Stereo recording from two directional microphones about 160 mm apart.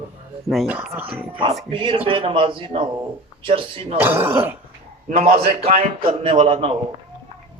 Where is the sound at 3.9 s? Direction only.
15° right (ahead or behind).